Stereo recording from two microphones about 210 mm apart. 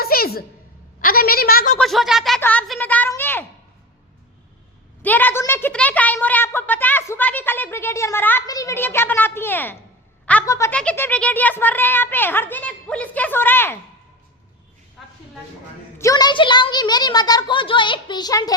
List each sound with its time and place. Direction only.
0.0 s a sound: 45° left (ahead or behind)
1.0 s a woman's voice: 45° left (ahead or behind)
1.8 s a woman's voice: centre (ahead or behind)
5.0 s a woman's voice: 10° left (ahead or behind)
15.0 s a sound: centre (ahead or behind)
16.0 s a woman's voice: 15° left (ahead or behind)